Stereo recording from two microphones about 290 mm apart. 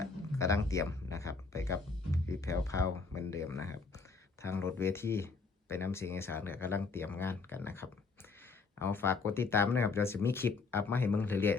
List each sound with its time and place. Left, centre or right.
0.0 s speech: centre